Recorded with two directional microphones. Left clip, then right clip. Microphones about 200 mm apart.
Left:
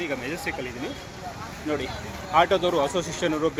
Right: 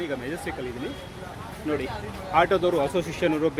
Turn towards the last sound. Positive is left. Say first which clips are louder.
# right 1 dB
turn(degrees=-30)  # may be behind; listen again after turning